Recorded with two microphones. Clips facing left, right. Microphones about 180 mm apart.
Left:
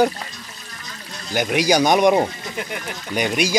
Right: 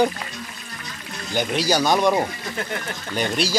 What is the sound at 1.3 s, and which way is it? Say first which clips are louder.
Speech: left 3 dB; 10° left (ahead or behind).